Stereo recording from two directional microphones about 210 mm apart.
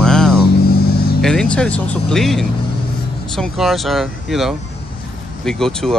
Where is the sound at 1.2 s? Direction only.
5° left (ahead or behind).